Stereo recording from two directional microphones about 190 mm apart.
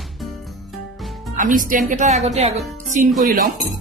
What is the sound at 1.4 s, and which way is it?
Speech, 45° right (ahead or behind).